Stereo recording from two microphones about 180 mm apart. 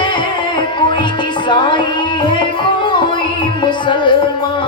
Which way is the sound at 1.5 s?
25° left (ahead or behind).